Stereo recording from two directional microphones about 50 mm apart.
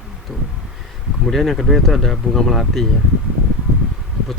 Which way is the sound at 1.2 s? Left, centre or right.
Centre.